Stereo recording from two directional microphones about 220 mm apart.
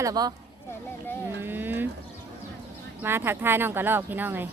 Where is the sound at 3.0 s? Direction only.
10° right (ahead or behind).